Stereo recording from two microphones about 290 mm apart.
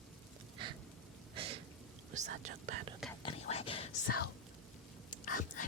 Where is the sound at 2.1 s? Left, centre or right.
Right.